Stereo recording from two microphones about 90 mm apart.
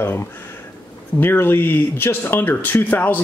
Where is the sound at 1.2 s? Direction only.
25° left (ahead or behind).